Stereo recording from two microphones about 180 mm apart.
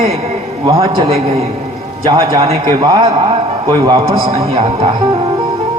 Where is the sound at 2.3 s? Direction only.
30° right (ahead or behind).